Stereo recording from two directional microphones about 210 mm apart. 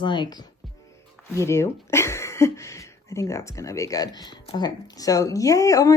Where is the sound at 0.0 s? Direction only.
20° left (ahead or behind).